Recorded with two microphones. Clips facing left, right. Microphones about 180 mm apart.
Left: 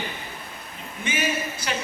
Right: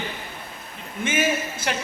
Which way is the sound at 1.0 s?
50° right (ahead or behind).